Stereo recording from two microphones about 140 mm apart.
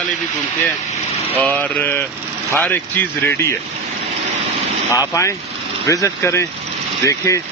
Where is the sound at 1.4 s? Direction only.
10° left (ahead or behind).